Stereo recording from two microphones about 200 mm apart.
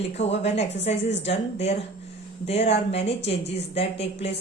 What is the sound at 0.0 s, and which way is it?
A woman's voice, 30° left (ahead or behind).